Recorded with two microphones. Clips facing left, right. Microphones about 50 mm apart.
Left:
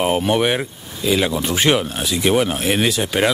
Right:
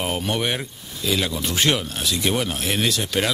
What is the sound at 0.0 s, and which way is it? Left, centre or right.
Speech, centre.